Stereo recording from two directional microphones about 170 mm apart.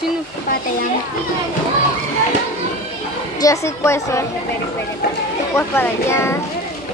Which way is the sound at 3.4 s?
15° left (ahead or behind).